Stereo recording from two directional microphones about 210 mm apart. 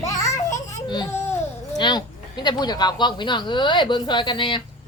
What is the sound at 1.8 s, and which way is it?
Speech, 20° left (ahead or behind).